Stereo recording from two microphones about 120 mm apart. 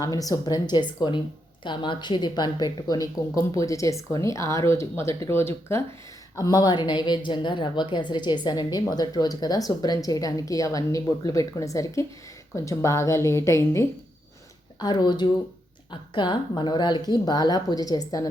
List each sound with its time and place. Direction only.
0.0 s a woman's voice: 30° left (ahead or behind)
14.8 s a woman's voice: 35° left (ahead or behind)